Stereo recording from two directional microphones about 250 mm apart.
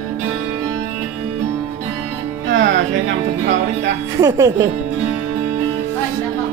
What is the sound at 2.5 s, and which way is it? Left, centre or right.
Music, right.